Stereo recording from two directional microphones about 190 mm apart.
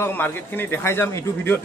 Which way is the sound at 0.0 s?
10° left (ahead or behind).